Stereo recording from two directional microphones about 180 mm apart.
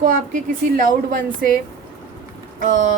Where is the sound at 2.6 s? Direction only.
45° right (ahead or behind).